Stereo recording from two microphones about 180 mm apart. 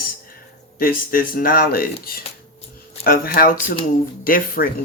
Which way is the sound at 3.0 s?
55° left (ahead or behind).